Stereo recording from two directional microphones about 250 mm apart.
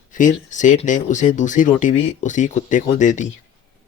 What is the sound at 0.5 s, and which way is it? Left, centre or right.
Speech, left.